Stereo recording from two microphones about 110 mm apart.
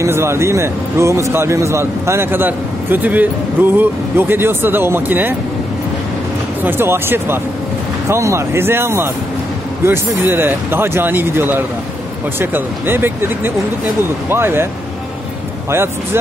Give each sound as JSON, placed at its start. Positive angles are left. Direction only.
{"t": 0.0, "sound": "a man's voice", "side_deg": -25}
{"t": 6.6, "sound": "a man's voice", "side_deg": -20}
{"t": 15.7, "sound": "a man's voice", "side_deg": -20}